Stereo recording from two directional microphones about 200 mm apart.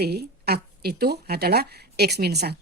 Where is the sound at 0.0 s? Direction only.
55° right (ahead or behind).